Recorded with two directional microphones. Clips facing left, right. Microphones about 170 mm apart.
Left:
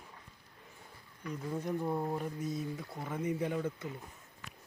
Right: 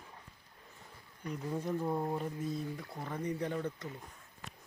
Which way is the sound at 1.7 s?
Centre (ahead or behind).